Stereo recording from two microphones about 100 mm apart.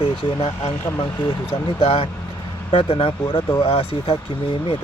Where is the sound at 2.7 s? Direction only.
65° left (ahead or behind).